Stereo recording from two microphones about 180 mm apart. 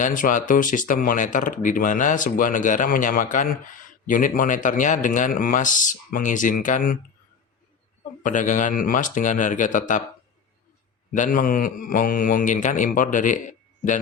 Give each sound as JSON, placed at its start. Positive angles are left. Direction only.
{"t": 0.0, "sound": "speech", "side_deg": 45}
{"t": 8.2, "sound": "speech", "side_deg": 45}
{"t": 11.1, "sound": "speech", "side_deg": 45}